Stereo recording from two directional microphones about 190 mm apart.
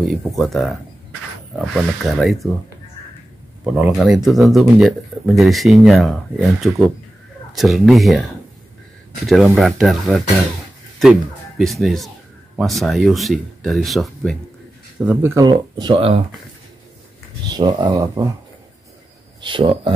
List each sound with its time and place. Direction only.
0.0 s speech: centre (ahead or behind)
3.6 s speech: 5° right (ahead or behind)
15.3 s speech: 25° right (ahead or behind)
17.5 s speech: 20° right (ahead or behind)
19.4 s speech: 30° right (ahead or behind)